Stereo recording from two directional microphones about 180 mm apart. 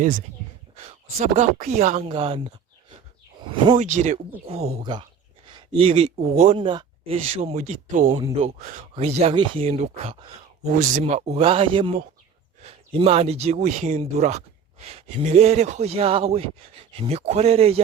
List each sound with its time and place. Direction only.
0.8 s speech: 40° right (ahead or behind)
2.0 s speech: 30° right (ahead or behind)
3.8 s speech: 45° right (ahead or behind)
6.6 s speech: 30° right (ahead or behind); by 8.1 s 45° right (ahead or behind)
8.1 s speech: 30° right (ahead or behind)
10.7 s speech: 45° right (ahead or behind)